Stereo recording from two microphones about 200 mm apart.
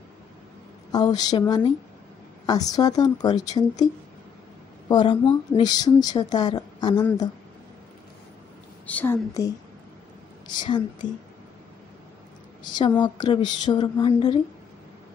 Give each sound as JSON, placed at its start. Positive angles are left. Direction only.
{"t": 0.9, "sound": "a woman's voice", "side_deg": 20}
{"t": 8.8, "sound": "a woman's voice", "side_deg": 10}
{"t": 13.0, "sound": "a woman's voice", "side_deg": 20}